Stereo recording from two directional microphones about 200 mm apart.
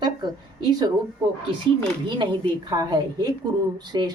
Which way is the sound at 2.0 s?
25° right (ahead or behind).